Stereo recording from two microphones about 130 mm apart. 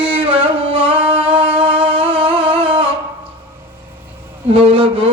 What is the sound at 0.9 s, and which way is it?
Music, 15° right (ahead or behind).